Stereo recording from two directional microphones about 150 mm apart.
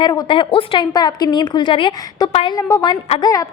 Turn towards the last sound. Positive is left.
turn(degrees=25)  # may be behind; listen again after turning